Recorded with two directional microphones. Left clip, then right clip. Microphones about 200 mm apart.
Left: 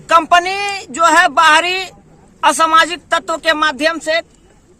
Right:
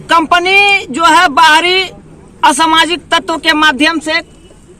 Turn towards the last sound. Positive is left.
turn(degrees=20)  # may be behind; listen again after turning